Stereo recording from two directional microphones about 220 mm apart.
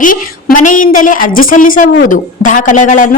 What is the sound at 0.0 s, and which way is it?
A woman's voice, 40° left (ahead or behind).